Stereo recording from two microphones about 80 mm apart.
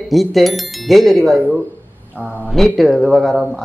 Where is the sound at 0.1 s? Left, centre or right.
Centre.